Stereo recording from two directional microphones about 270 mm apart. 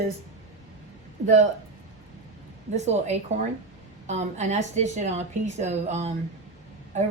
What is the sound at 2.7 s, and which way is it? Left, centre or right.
A woman's voice, right.